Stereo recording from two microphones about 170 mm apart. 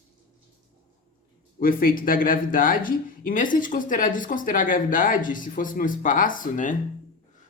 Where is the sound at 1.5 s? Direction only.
55° left (ahead or behind).